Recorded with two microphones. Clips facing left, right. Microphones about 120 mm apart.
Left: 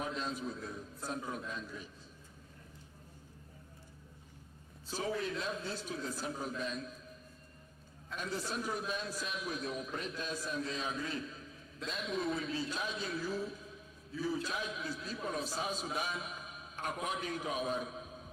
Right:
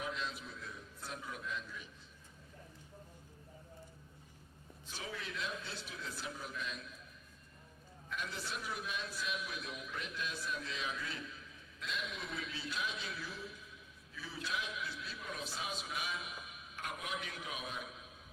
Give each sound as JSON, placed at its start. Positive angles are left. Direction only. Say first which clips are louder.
{"t": 0.0, "sound": "a man's voice", "louder": "left 4 dB", "side_deg": 40}
{"t": 4.9, "sound": "a man's voice", "louder": "left 9 dB", "side_deg": 40}
{"t": 8.1, "sound": "a man's voice", "louder": "left 4 dB", "side_deg": 40}